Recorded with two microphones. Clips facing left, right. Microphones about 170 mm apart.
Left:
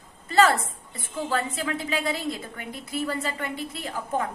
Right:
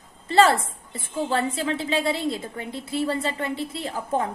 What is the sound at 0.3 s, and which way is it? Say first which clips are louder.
A woman's voice: right 2 dB; 30° right (ahead or behind).